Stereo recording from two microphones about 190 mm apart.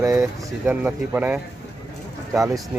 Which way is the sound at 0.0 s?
15° right (ahead or behind).